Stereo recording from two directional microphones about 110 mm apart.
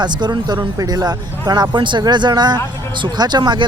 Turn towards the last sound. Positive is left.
turn(degrees=-40)  # may be behind; listen again after turning